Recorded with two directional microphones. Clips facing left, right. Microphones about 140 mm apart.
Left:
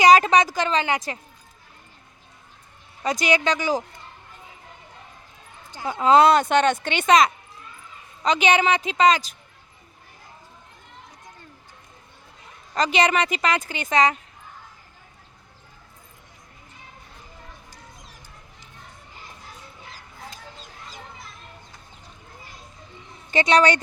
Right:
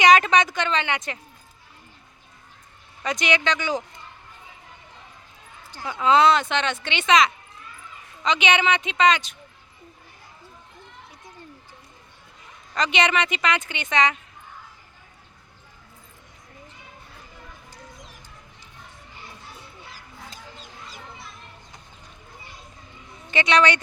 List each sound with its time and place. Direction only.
0.0 s a woman's voice: 35° left (ahead or behind)
3.0 s a woman's voice: 35° left (ahead or behind)
5.7 s a woman's voice: 20° left (ahead or behind)
6.0 s a woman's voice: 40° left (ahead or behind)
12.7 s a woman's voice: 35° left (ahead or behind)
23.3 s a woman's voice: 40° left (ahead or behind)